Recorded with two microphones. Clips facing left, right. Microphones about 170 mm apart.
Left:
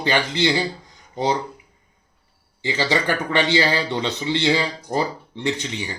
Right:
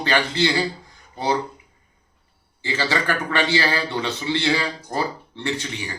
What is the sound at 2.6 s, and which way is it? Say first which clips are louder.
Speech: left 2 dB; 15° left (ahead or behind).